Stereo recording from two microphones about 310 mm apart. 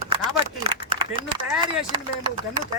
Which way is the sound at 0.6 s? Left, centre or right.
Centre.